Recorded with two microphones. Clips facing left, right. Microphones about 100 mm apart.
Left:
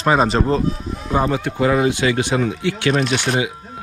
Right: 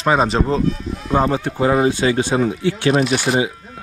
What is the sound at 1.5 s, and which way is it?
Speech, 35° right (ahead or behind).